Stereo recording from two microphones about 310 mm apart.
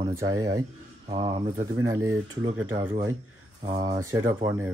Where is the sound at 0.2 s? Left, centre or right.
Centre.